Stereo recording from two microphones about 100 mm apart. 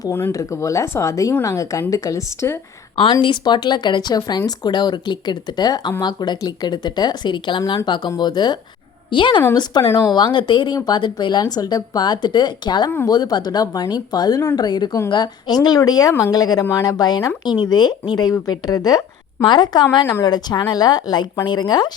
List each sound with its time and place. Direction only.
0.3 s speech: 35° left (ahead or behind)
2.9 s speech: 55° left (ahead or behind)
9.6 s speech: 45° left (ahead or behind)